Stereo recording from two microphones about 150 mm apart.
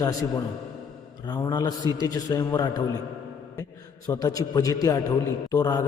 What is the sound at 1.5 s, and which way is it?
A man's voice, 25° left (ahead or behind).